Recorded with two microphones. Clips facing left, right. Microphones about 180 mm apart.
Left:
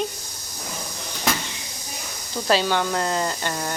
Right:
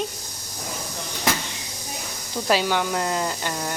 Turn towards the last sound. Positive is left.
turn(degrees=-5)  # may be behind; listen again after turning